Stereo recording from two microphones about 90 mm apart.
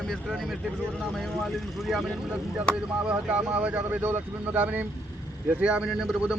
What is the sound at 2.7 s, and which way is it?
A man's voice, 10° right (ahead or behind).